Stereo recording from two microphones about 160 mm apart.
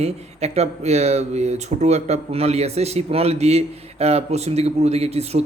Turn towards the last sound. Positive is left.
turn(degrees=-40)  # may be behind; listen again after turning